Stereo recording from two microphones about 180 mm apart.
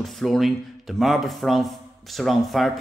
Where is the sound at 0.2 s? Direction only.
Centre (ahead or behind).